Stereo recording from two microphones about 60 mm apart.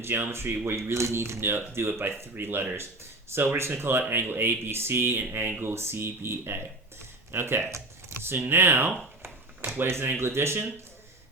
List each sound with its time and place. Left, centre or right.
0.0 s speech: right
0.8 s speech: right